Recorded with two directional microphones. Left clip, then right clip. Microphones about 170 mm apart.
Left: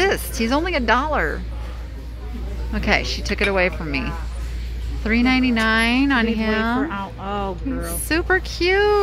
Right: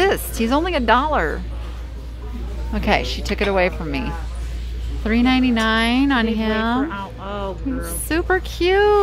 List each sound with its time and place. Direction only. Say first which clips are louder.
0.0 s a woman's voice: right 1 dB; 10° right (ahead or behind)
2.7 s speech: right 1 dB; 10° right (ahead or behind)
6.9 s a sound: left 1 dB; 55° left (ahead or behind)
8.1 s speech: even; 5° right (ahead or behind)